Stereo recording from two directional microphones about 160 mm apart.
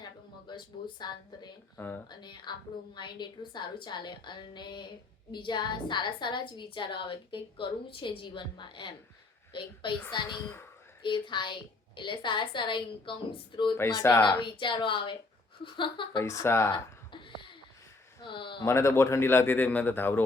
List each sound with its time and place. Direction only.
0.0 s speech: 25° left (ahead or behind)
1.7 s speech: 15° left (ahead or behind)
2.0 s a woman's voice: 30° left (ahead or behind)
13.7 s a woman's voice: 20° left (ahead or behind)
16.2 s speech: 20° left (ahead or behind)
16.7 s a sound: 30° left (ahead or behind)
18.2 s speech: 30° left (ahead or behind)
18.6 s speech: 15° left (ahead or behind)